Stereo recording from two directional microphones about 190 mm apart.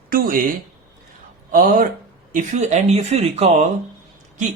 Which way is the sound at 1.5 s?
45° right (ahead or behind).